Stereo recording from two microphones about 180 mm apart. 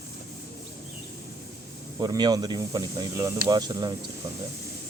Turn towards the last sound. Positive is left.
turn(degrees=-25)  # may be behind; listen again after turning